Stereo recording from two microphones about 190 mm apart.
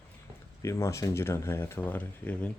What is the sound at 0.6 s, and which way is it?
Speech, 15° left (ahead or behind).